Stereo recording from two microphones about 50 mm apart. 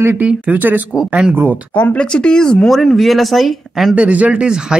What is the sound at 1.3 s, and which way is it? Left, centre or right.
Speech, right.